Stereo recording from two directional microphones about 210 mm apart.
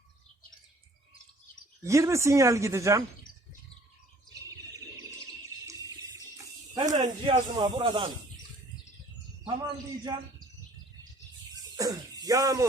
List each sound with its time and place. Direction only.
1.8 s speech: 15° right (ahead or behind)
6.3 s snake: 20° right (ahead or behind)
10.1 s speech: 20° right (ahead or behind)
11.5 s a sound: 15° right (ahead or behind)